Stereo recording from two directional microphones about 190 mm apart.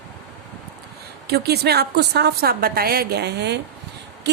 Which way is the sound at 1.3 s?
55° right (ahead or behind).